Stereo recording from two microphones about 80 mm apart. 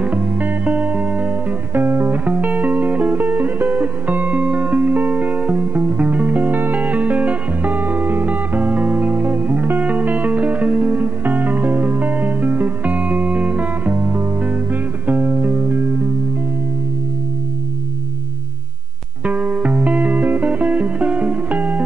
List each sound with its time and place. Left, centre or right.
0.0 s music: centre
19.2 s music: centre